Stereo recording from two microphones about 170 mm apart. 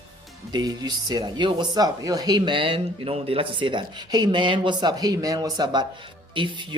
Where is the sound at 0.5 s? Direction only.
25° right (ahead or behind).